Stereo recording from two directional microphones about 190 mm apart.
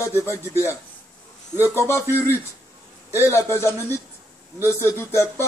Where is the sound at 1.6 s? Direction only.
10° right (ahead or behind).